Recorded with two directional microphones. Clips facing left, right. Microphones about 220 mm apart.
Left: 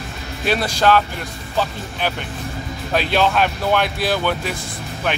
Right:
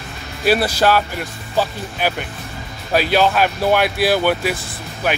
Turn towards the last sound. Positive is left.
turn(degrees=-5)  # may be behind; listen again after turning